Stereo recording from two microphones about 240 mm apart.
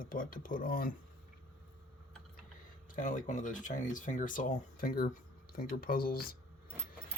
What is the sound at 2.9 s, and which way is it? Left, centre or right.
Speech, left.